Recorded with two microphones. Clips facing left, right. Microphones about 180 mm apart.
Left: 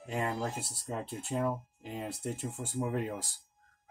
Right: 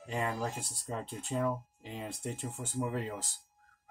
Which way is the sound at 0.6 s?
5° left (ahead or behind).